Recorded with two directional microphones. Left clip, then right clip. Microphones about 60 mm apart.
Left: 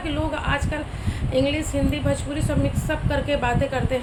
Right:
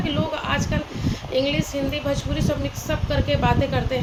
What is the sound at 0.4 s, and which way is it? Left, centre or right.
A woman's voice, left.